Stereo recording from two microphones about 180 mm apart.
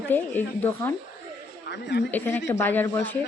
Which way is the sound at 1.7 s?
75° left (ahead or behind).